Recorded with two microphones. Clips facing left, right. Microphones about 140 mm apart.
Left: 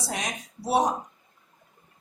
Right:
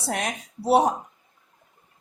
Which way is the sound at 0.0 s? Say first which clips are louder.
Right 4 dB; 60° right (ahead or behind).